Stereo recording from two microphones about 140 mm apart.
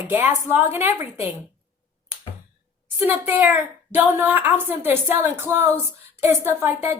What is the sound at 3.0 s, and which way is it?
A woman's voice, 15° right (ahead or behind).